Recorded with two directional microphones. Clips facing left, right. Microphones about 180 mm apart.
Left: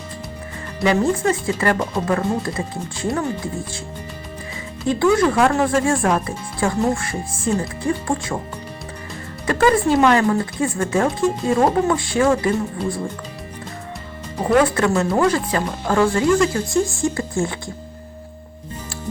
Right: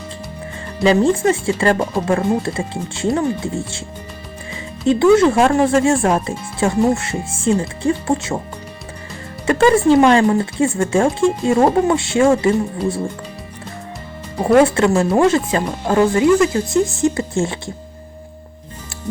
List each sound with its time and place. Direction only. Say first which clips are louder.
0.8 s speech: right 4 dB; 25° right (ahead or behind)
5.1 s speech: right 4 dB; 25° right (ahead or behind)
9.5 s speech: right 4 dB; 25° right (ahead or behind)
14.4 s speech: right 4 dB; 25° right (ahead or behind)